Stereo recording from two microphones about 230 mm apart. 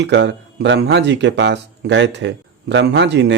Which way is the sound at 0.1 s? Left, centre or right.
Right.